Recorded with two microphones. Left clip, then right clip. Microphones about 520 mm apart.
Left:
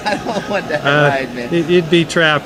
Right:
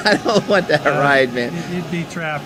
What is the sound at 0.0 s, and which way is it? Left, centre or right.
Speech, right.